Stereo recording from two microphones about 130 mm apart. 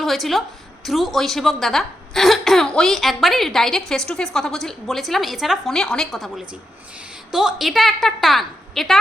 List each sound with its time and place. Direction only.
0.0 s a woman's voice: centre (ahead or behind)